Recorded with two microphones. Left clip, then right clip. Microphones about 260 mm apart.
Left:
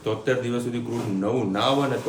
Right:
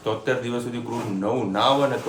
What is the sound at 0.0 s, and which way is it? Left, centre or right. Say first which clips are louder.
A man's voice: even; centre.